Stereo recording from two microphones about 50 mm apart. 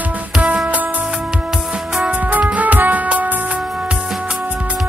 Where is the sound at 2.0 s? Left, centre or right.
Right.